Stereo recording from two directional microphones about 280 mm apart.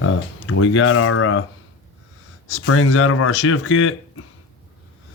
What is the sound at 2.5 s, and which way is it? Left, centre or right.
Speech, left.